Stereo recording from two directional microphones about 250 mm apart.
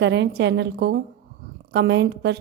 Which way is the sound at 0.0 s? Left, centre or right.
Right.